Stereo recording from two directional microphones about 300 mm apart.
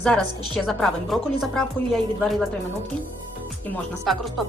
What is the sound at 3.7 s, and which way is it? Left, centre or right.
Speech, centre.